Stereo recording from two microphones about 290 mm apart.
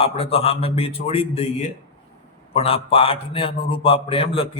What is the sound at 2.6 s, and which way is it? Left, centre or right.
A man's voice, centre.